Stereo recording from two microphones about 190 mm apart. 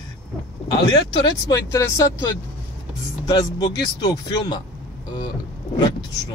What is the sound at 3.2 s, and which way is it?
Speech, 20° left (ahead or behind).